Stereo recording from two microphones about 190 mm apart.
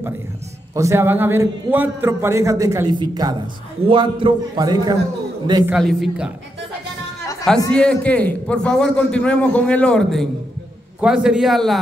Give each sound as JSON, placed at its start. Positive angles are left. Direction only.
{"t": 0.7, "sound": "a man's voice", "side_deg": -15}
{"t": 5.7, "sound": "a man's voice", "side_deg": 0}
{"t": 7.7, "sound": "a man's voice", "side_deg": 5}